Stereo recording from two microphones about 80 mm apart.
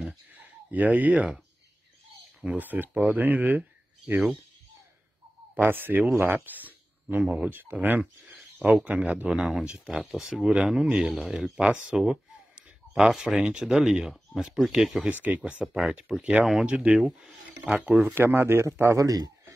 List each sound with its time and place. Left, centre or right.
0.4 s speech: centre
2.4 s speech: right
5.6 s speech: right; by 15.0 s centre
15.0 s speech: centre
15.6 s speech: centre
18.1 s speech: right
19.0 s speech: right